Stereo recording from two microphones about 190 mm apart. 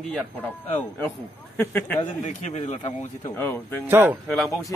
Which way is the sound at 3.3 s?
15° left (ahead or behind).